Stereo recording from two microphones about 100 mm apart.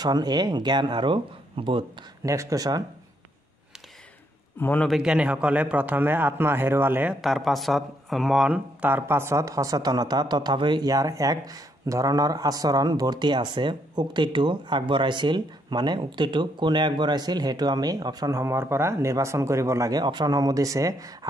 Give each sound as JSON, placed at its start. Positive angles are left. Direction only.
{"t": 0.0, "sound": "speech", "side_deg": -40}
{"t": 2.2, "sound": "speech", "side_deg": -35}
{"t": 4.6, "sound": "a man's voice", "side_deg": 20}
{"t": 4.8, "sound": "a man's voice", "side_deg": -5}
{"t": 7.2, "sound": "speech", "side_deg": 0}
{"t": 8.8, "sound": "speech", "side_deg": -20}